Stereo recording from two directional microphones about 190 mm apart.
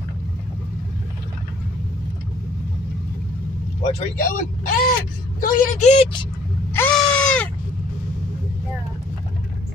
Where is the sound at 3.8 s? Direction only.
30° left (ahead or behind).